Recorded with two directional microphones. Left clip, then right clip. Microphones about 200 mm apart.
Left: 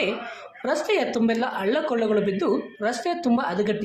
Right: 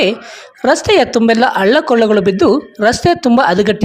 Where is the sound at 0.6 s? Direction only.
50° right (ahead or behind).